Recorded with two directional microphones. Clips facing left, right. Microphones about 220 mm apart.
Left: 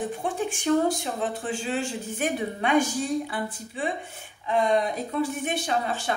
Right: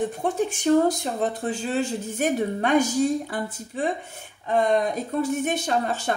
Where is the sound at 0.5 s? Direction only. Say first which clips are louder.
Right 3 dB; 40° right (ahead or behind).